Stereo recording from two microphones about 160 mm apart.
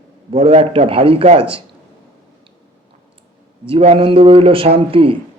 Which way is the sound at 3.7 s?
40° right (ahead or behind).